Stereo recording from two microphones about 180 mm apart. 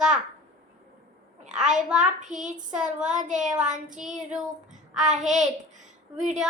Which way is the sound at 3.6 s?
45° right (ahead or behind).